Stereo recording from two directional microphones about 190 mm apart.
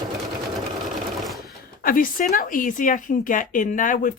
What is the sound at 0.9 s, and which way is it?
Sewing machine, centre (ahead or behind).